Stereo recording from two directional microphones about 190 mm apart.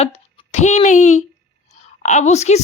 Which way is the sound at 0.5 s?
40° left (ahead or behind).